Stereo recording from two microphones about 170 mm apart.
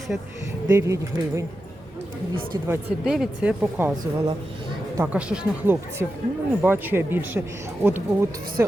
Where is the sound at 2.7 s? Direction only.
5° right (ahead or behind).